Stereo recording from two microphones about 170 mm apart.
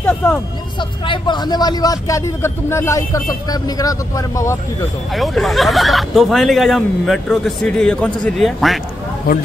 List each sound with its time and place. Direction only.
0.0 s speech: 10° left (ahead or behind)
0.7 s speech: 30° left (ahead or behind)
5.1 s speech: centre (ahead or behind)